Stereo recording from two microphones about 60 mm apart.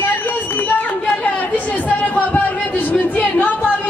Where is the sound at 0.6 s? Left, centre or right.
Left.